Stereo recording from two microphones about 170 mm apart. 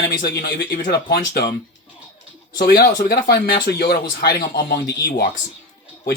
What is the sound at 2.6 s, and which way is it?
Speech, 60° left (ahead or behind).